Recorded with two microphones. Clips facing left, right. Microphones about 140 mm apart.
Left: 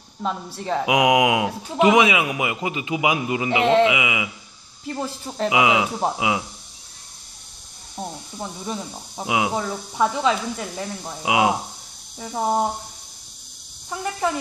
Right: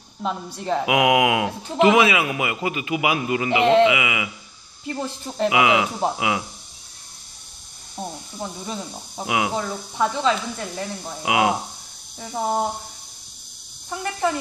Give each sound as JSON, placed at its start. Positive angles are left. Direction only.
{"t": 0.6, "sound": "speech", "side_deg": 0}
{"t": 0.8, "sound": "a man's voice", "side_deg": 20}
{"t": 3.6, "sound": "speech", "side_deg": 0}
{"t": 3.9, "sound": "a man's voice", "side_deg": 15}
{"t": 4.8, "sound": "speech", "side_deg": 5}
{"t": 5.5, "sound": "a man's voice", "side_deg": 20}
{"t": 7.9, "sound": "speech", "side_deg": 5}
{"t": 9.2, "sound": "a man's voice", "side_deg": 20}
{"t": 11.2, "sound": "a man's voice", "side_deg": 15}
{"t": 12.2, "sound": "speech", "side_deg": 0}
{"t": 13.8, "sound": "speech", "side_deg": 0}